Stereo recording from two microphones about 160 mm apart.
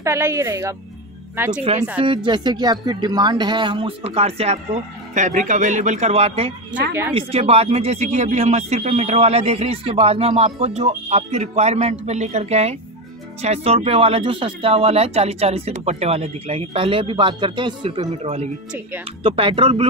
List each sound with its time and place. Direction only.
0.0 s speech: 15° right (ahead or behind)
2.0 s speech: 30° right (ahead or behind)
5.1 s speech: 50° right (ahead or behind)
6.9 s a woman's voice: 15° right (ahead or behind)
7.2 s speech: 40° right (ahead or behind)